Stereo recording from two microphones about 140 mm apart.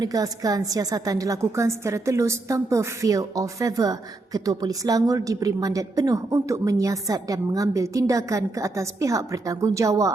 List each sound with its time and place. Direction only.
0.0 s a woman's voice: 25° right (ahead or behind)